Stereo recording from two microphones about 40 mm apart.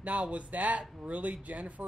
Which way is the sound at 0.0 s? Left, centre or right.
Right.